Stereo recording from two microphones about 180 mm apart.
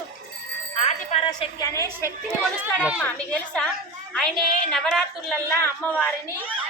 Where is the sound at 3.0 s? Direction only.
10° left (ahead or behind).